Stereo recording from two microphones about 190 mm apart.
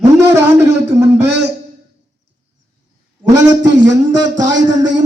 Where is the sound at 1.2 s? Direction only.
65° right (ahead or behind).